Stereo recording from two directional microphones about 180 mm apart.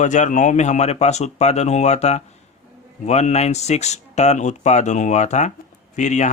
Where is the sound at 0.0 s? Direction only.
45° left (ahead or behind).